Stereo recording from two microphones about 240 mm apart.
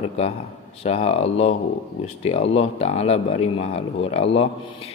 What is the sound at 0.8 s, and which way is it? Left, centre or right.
Speech, left.